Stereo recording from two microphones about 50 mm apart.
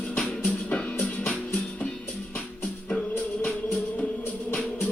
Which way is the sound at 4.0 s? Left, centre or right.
Left.